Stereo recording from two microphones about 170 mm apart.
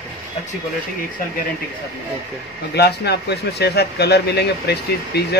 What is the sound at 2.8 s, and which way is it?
Speech, 75° left (ahead or behind).